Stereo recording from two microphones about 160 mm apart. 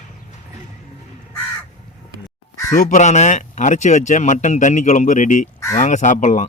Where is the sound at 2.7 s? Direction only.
50° left (ahead or behind).